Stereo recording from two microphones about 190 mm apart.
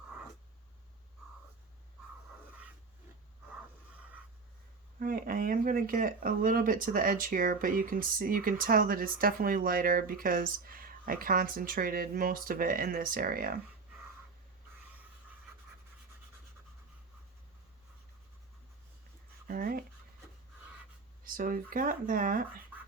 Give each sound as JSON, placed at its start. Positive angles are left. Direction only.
{"t": 4.9, "sound": "speech", "side_deg": -50}
{"t": 19.5, "sound": "a sound", "side_deg": -50}
{"t": 21.2, "sound": "speech", "side_deg": -45}